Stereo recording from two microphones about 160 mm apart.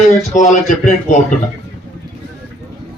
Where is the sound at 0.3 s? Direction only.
50° left (ahead or behind).